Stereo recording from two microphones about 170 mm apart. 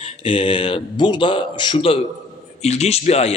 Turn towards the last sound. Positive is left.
turn(degrees=40)  # may be behind; listen again after turning